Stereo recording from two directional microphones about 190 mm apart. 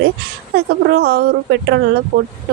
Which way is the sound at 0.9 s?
55° right (ahead or behind).